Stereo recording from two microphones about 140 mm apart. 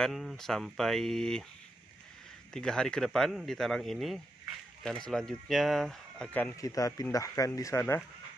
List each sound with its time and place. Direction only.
0.0 s speech: centre (ahead or behind)
2.5 s speech: 5° left (ahead or behind)
6.5 s speech: 25° left (ahead or behind)